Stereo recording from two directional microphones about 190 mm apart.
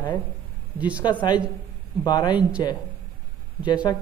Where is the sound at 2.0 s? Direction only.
20° left (ahead or behind).